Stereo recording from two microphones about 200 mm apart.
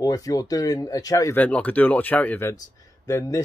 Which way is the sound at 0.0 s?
15° left (ahead or behind).